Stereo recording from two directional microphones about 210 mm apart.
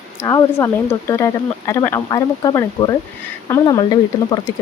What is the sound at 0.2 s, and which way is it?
Speech, 15° left (ahead or behind).